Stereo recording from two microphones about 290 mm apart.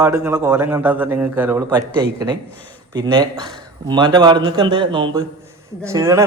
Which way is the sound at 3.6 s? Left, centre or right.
Centre.